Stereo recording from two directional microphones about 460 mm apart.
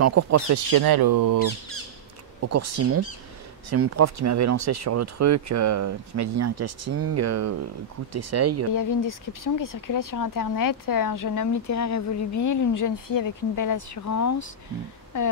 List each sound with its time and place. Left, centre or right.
0.0 s speech: right
2.4 s speech: right
8.7 s speech: left
15.1 s a sound: left